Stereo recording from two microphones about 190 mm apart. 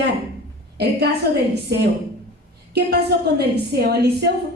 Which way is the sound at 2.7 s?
60° right (ahead or behind).